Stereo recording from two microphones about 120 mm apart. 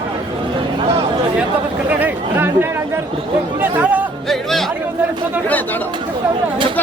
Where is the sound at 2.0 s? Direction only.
15° right (ahead or behind).